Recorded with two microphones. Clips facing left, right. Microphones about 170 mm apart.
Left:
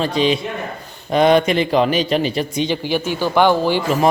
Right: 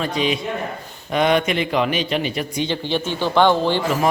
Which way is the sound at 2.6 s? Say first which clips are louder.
Left 1 dB; 10° left (ahead or behind).